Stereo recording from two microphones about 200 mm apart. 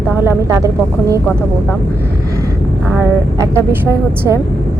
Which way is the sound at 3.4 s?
15° right (ahead or behind).